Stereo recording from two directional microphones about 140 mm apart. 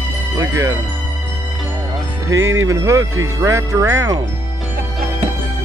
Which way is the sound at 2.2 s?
20° right (ahead or behind).